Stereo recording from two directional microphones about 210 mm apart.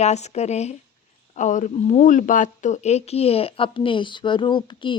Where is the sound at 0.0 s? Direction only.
30° left (ahead or behind).